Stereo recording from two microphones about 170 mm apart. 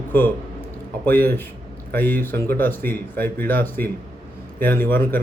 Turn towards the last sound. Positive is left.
turn(degrees=10)  # may be behind; listen again after turning